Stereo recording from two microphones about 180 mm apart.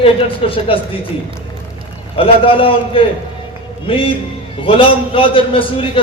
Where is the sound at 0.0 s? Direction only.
30° left (ahead or behind).